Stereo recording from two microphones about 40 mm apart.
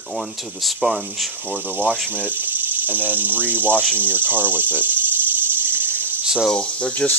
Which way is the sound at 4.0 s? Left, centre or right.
Right.